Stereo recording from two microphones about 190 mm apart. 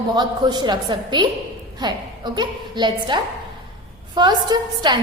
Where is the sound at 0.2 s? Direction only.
20° right (ahead or behind).